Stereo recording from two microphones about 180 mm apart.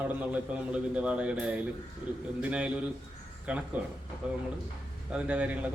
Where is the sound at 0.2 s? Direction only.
5° right (ahead or behind).